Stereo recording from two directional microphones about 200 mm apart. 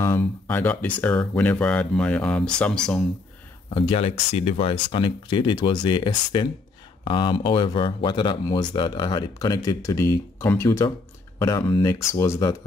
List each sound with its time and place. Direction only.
0.0 s speech: 10° left (ahead or behind)
3.7 s speech: 25° left (ahead or behind)